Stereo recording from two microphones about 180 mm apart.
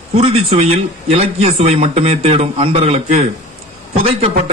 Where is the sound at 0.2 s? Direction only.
30° right (ahead or behind).